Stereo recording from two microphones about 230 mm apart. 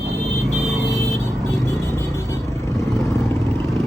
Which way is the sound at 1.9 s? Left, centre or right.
Centre.